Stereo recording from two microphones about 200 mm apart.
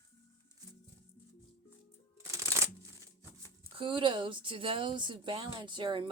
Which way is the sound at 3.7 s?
25° right (ahead or behind).